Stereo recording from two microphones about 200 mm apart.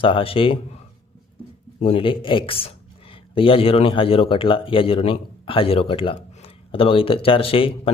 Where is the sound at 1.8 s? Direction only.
30° left (ahead or behind).